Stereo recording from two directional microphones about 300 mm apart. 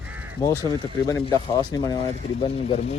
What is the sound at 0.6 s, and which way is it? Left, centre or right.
Speech, centre.